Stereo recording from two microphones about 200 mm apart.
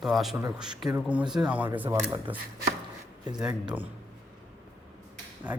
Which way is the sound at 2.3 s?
25° right (ahead or behind).